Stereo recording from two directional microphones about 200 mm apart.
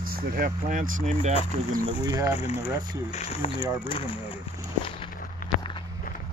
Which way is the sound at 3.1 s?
30° left (ahead or behind).